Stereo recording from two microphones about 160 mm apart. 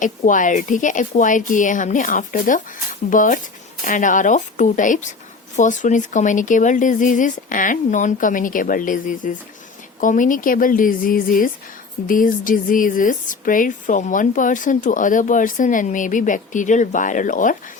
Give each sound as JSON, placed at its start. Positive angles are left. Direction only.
{"t": 0.0, "sound": "speech", "side_deg": 55}